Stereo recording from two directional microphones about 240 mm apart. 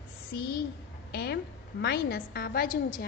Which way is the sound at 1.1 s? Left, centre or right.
Left.